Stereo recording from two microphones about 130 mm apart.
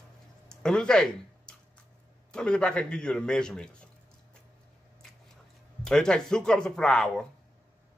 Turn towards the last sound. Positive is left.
turn(degrees=5)  # may be behind; listen again after turning